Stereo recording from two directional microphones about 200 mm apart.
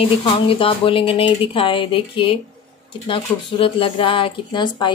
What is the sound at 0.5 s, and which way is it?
Speech, 25° left (ahead or behind).